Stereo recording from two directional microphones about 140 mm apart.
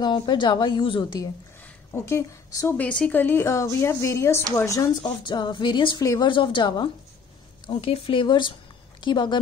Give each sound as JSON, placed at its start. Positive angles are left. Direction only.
{"t": 0.0, "sound": "speech", "side_deg": 35}
{"t": 1.9, "sound": "a woman's voice", "side_deg": 20}
{"t": 2.8, "sound": "a woman's voice", "side_deg": 10}